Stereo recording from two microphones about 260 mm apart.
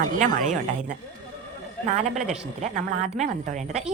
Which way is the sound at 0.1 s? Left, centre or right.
Right.